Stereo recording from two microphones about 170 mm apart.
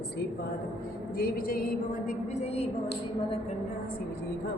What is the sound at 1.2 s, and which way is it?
A woman's voice, 60° left (ahead or behind).